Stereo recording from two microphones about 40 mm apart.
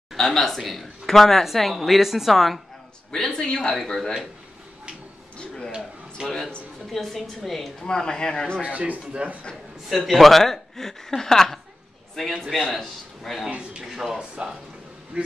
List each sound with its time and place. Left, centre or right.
0.1 s a woman's voice: centre
3.1 s a man's voice: centre
3.7 s a woman's voice: centre
6.2 s a man's voice: centre
6.9 s a woman's voice: centre
7.8 s speech: centre
8.6 s a man's voice: right
9.8 s a woman's voice: centre
13.5 s a man's voice: right
13.8 s a woman's voice: centre
14.4 s a man's voice: right